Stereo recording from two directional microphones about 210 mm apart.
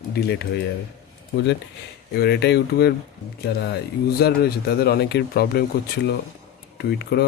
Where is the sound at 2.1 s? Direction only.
50° left (ahead or behind).